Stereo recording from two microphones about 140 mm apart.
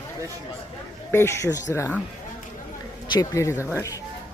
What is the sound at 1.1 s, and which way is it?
Speech, 15° left (ahead or behind).